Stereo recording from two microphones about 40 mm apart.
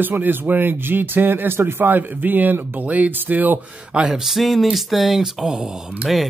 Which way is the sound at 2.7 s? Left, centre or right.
Right.